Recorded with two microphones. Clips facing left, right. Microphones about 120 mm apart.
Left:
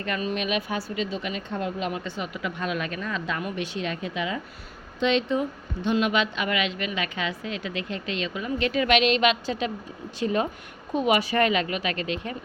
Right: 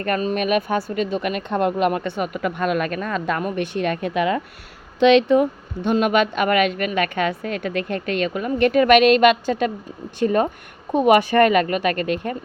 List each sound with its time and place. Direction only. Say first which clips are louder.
0.0 s speech: right 7 dB; 45° right (ahead or behind)
4.9 s speech: right 10 dB; 75° right (ahead or behind); by 12.4 s 50° right (ahead or behind)